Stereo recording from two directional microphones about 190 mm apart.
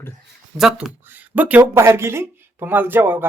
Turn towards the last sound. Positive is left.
turn(degrees=-10)  # may be behind; listen again after turning